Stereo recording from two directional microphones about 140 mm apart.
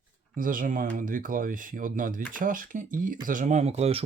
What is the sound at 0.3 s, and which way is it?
Speech, 80° right.